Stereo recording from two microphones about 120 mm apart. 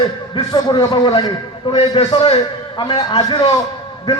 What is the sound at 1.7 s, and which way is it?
A man's voice, 50° left (ahead or behind).